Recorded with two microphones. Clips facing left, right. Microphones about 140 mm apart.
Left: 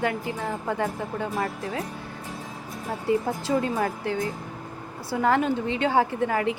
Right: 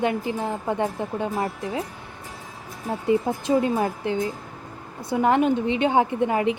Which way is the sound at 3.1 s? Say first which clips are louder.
Right 3 dB; 20° right (ahead or behind).